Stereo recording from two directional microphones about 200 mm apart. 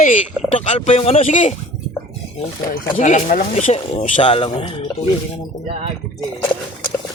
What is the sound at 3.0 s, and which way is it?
Speech, 40° left (ahead or behind).